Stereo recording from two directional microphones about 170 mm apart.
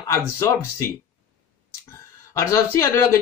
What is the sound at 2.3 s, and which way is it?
Speech, 20° left (ahead or behind).